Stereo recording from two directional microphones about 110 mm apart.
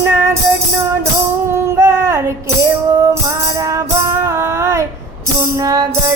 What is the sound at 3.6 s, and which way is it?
Music, 30° right (ahead or behind).